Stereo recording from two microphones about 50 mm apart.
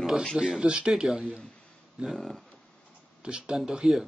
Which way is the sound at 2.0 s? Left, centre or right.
Centre.